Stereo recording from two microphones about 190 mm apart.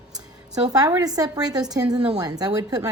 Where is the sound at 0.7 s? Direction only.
20° right (ahead or behind).